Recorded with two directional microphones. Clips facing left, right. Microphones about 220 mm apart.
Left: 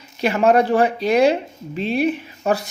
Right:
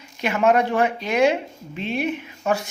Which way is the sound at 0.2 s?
35° left (ahead or behind).